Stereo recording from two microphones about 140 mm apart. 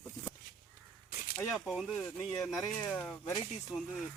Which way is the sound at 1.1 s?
90° left.